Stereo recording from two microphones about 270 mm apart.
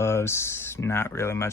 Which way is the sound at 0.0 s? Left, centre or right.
Centre.